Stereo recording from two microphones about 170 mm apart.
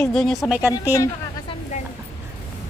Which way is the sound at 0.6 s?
10° right (ahead or behind).